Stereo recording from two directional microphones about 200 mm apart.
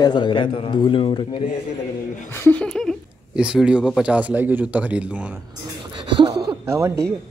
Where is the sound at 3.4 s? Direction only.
5° right (ahead or behind).